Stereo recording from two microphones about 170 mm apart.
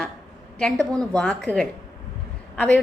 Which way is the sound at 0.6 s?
5° left (ahead or behind).